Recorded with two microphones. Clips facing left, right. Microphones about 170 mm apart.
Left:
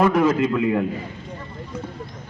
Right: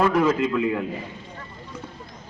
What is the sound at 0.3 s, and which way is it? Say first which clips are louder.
Speech: left 2 dB; 30° left (ahead or behind).